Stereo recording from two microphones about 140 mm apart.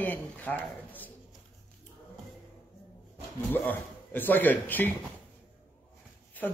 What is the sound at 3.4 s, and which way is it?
A woman's voice, 15° left (ahead or behind).